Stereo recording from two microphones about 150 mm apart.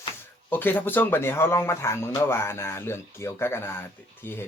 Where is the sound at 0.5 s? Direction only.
10° left (ahead or behind).